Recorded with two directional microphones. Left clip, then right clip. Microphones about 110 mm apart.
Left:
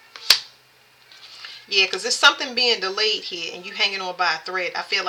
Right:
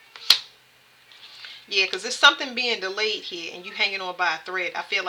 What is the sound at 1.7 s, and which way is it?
A woman's voice, 25° right (ahead or behind).